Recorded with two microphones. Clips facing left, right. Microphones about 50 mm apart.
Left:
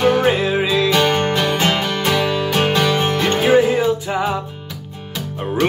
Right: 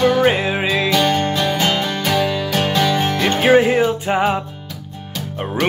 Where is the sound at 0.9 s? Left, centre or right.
Left.